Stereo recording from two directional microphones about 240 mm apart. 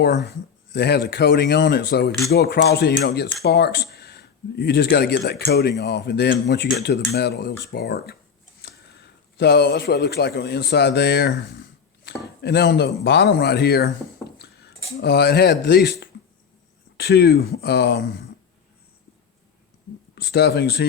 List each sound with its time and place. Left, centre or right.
0.0 s a man's voice: left
14.3 s cutlery: left
14.9 s speech: left
20.1 s speech: left